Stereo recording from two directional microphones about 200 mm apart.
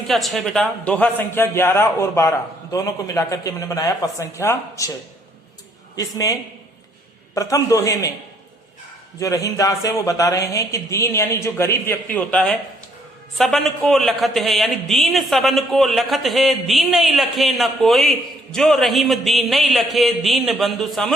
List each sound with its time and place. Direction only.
0.1 s speech: centre (ahead or behind)
6.0 s speech: 15° left (ahead or behind)
9.1 s a man's voice: 15° left (ahead or behind); by 21.1 s centre (ahead or behind)